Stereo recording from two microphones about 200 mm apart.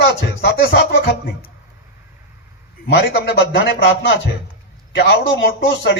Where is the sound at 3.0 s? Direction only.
55° left (ahead or behind).